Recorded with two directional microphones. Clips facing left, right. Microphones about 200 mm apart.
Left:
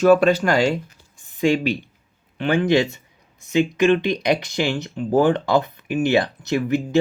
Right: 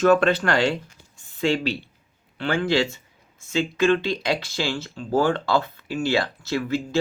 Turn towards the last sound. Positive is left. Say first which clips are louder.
# left 5 dB
turn(degrees=20)  # may be behind; listen again after turning